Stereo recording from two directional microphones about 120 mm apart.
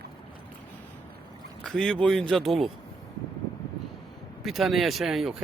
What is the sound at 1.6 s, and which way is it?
Speech, 5° left (ahead or behind).